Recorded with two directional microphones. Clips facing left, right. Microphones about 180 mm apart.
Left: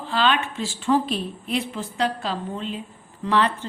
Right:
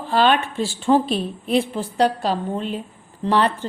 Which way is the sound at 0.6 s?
30° right (ahead or behind).